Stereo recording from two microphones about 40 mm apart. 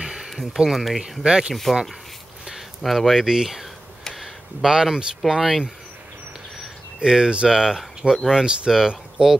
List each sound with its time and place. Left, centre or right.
0.0 s a sound: centre
0.3 s a sound: centre
0.7 s speech: centre
1.2 s speech: centre
1.5 s speech: centre
2.8 s speech: centre
4.1 s a sound: centre
4.7 s speech: centre
7.0 s speech: right